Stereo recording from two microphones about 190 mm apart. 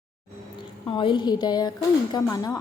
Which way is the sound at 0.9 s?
25° left (ahead or behind).